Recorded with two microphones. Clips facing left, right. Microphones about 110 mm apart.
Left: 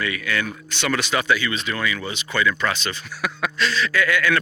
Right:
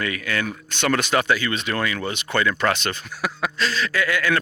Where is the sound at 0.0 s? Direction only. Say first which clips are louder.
Even; 40° right (ahead or behind).